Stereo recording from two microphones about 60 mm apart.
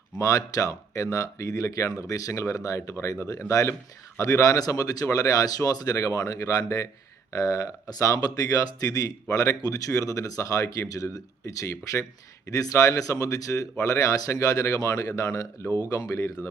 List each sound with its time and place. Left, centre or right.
0.2 s speech: left
4.2 s speech: left
5.0 s speech: left
8.8 s speech: left